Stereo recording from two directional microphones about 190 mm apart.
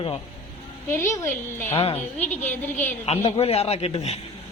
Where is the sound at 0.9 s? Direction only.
15° left (ahead or behind).